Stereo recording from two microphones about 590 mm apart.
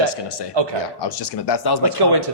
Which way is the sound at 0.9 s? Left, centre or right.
Left.